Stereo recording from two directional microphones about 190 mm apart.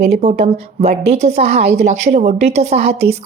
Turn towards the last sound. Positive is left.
turn(degrees=-35)  # may be behind; listen again after turning